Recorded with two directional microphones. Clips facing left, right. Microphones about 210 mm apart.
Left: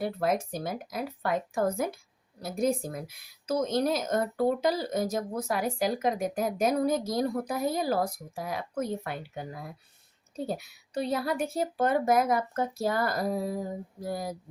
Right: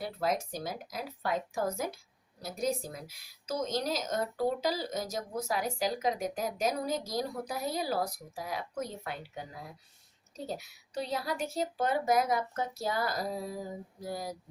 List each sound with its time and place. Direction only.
0.0 s a woman's voice: 55° left (ahead or behind)